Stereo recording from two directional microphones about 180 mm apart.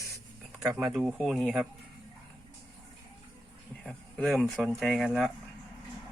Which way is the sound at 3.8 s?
5° left (ahead or behind).